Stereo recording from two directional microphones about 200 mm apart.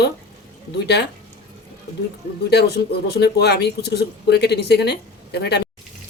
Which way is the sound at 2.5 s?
55° left (ahead or behind).